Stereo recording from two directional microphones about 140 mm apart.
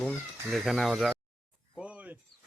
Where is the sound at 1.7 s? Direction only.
10° right (ahead or behind).